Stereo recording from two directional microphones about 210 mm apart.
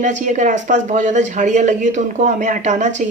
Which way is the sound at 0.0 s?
35° right (ahead or behind).